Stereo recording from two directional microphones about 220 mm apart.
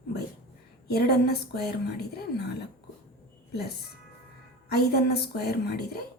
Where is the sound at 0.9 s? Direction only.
45° left (ahead or behind).